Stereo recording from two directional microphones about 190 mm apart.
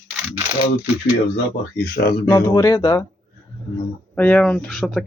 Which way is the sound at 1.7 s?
50° left (ahead or behind).